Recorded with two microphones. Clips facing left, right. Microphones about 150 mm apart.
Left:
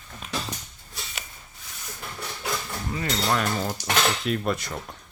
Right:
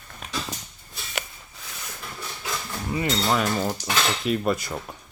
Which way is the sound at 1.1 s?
85° right.